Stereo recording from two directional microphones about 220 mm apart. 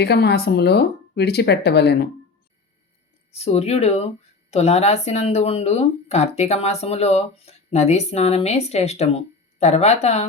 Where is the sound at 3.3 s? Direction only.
30° left (ahead or behind).